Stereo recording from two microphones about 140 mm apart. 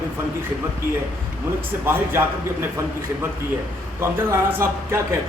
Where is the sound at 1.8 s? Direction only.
15° right (ahead or behind).